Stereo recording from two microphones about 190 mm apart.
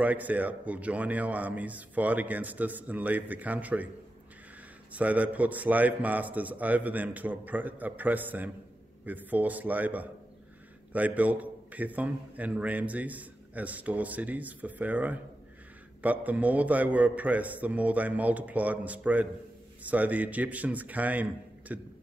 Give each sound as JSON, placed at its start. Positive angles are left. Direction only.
{"t": 0.0, "sound": "a man's voice", "side_deg": -10}
{"t": 4.9, "sound": "a man's voice", "side_deg": -10}